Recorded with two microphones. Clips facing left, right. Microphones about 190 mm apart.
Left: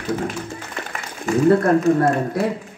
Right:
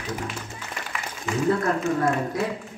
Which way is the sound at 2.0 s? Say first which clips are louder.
Left 5 dB; 65° left (ahead or behind).